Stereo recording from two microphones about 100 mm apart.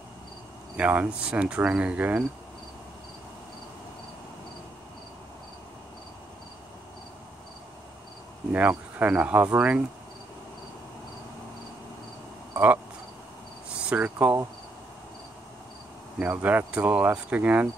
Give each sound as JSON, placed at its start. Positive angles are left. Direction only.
{"t": 0.7, "sound": "cricket", "side_deg": -15}
{"t": 8.5, "sound": "cricket", "side_deg": -15}
{"t": 12.5, "sound": "speech", "side_deg": -15}
{"t": 13.8, "sound": "speech", "side_deg": -15}
{"t": 16.2, "sound": "cricket", "side_deg": -15}